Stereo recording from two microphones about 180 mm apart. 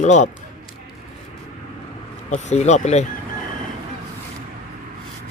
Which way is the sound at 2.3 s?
40° left (ahead or behind).